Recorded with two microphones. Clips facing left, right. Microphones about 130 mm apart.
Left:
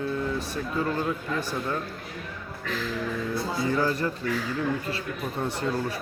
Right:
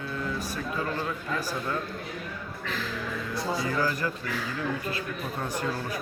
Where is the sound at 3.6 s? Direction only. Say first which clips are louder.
Left 5 dB; 25° left (ahead or behind).